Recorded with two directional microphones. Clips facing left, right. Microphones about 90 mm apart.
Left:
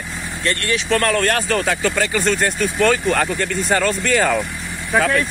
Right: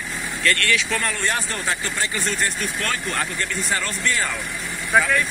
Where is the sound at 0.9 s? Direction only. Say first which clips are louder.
Left 7 dB; 60° left (ahead or behind); by 4.4 s 80° left.